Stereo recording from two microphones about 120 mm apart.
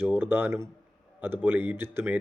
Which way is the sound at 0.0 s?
20° right (ahead or behind).